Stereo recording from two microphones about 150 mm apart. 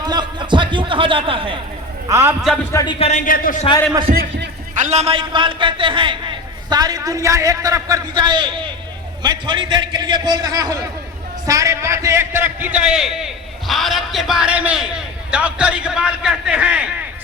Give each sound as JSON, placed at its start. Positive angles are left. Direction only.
{"t": 0.0, "sound": "a sound", "side_deg": -30}
{"t": 2.0, "sound": "a man's voice", "side_deg": -20}
{"t": 3.0, "sound": "speech", "side_deg": 55}
{"t": 4.8, "sound": "a man's voice", "side_deg": -50}